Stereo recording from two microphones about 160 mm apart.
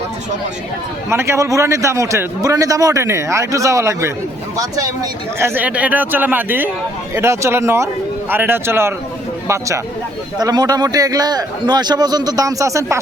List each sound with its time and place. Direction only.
1.1 s a man's voice: 15° right (ahead or behind)
5.4 s a man's voice: 10° right (ahead or behind)